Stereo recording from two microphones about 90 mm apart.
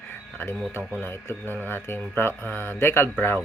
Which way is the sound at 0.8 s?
35° right (ahead or behind).